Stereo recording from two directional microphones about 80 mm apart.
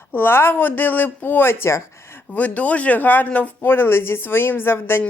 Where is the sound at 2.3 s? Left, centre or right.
Centre.